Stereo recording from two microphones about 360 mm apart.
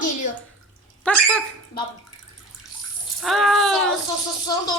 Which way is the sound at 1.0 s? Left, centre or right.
Centre.